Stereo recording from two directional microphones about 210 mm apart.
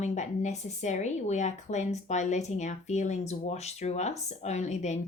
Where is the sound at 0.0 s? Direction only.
35° left (ahead or behind).